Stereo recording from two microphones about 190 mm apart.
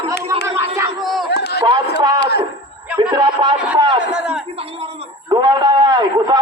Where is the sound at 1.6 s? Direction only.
20° right (ahead or behind).